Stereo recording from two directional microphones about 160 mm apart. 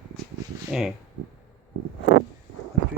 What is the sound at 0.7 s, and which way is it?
Speech, 5° right (ahead or behind).